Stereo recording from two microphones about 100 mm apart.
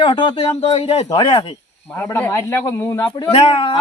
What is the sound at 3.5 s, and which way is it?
Speech, 70° left (ahead or behind).